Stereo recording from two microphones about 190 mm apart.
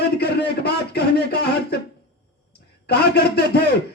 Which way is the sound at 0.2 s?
60° left (ahead or behind).